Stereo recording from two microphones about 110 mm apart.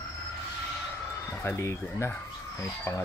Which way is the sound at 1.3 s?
25° left (ahead or behind).